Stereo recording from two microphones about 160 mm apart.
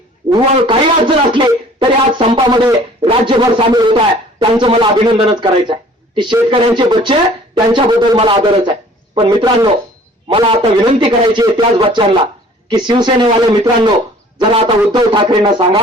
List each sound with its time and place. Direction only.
0.7 s a man's voice: 30° right (ahead or behind)